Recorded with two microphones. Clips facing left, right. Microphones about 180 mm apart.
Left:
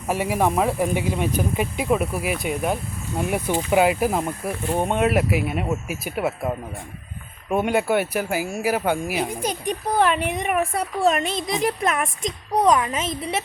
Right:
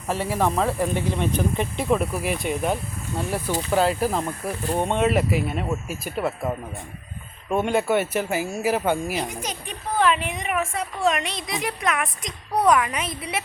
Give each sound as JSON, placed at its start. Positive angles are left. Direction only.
{"t": 0.1, "sound": "speech", "side_deg": 15}
{"t": 3.2, "sound": "speech", "side_deg": 15}
{"t": 7.5, "sound": "speech", "side_deg": 5}
{"t": 9.9, "sound": "a woman's voice", "side_deg": 45}
{"t": 11.3, "sound": "speech", "side_deg": 0}
{"t": 11.8, "sound": "speech", "side_deg": 30}